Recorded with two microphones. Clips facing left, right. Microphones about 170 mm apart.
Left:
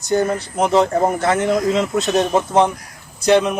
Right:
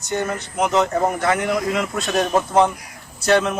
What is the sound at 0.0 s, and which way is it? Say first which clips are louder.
A man's voice: left 6 dB; 35° left (ahead or behind).